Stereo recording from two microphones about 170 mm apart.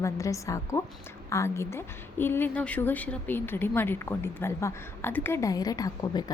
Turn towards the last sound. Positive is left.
turn(degrees=20)  # may be behind; listen again after turning